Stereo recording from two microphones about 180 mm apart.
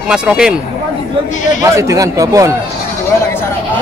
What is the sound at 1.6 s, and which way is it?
Speech, 15° right (ahead or behind).